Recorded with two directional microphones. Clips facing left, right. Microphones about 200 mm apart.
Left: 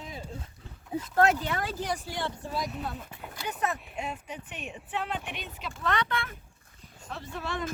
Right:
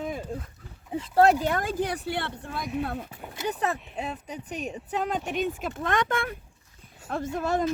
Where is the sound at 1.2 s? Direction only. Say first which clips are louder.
Right 5 dB; 45° right (ahead or behind); by 3.1 s 60° right (ahead or behind).